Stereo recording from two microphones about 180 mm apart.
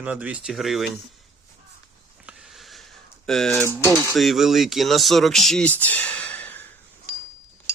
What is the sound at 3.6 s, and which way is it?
Speech, 15° left (ahead or behind).